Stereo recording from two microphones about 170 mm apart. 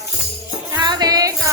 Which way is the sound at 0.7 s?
25° right (ahead or behind).